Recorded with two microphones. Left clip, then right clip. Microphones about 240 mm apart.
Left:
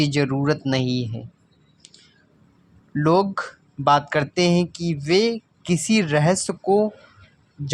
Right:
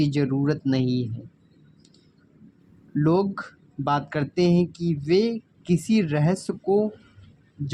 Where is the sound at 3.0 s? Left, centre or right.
Left.